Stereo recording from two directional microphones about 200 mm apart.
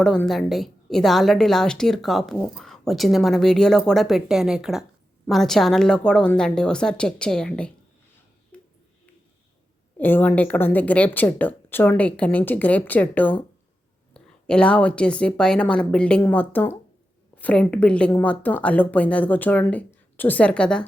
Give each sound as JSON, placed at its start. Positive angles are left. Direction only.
{"t": 0.0, "sound": "a woman's voice", "side_deg": 5}
{"t": 8.5, "sound": "a sound", "side_deg": 5}
{"t": 10.0, "sound": "a woman's voice", "side_deg": 10}